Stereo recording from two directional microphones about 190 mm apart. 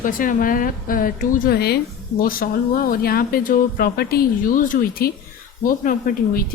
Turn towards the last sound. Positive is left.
turn(degrees=50)  # may be behind; listen again after turning